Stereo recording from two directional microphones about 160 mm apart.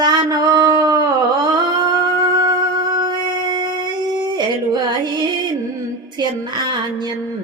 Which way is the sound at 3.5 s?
25° right (ahead or behind).